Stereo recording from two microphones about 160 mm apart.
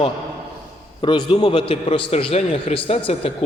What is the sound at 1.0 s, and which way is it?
A man's voice, 30° left (ahead or behind).